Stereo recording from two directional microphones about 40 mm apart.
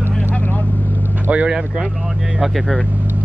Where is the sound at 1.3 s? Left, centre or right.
Right.